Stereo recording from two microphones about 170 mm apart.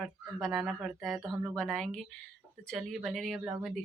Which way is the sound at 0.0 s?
Centre (ahead or behind).